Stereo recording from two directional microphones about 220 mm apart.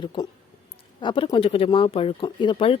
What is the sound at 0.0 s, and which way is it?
Speech, 20° left (ahead or behind).